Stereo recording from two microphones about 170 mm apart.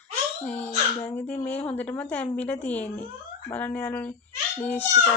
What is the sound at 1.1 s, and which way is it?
A woman's voice, 10° left (ahead or behind).